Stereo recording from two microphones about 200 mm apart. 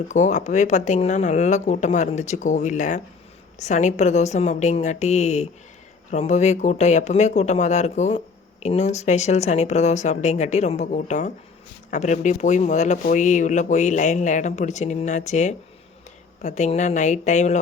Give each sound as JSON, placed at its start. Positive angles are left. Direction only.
{"t": 0.1, "sound": "speech", "side_deg": 35}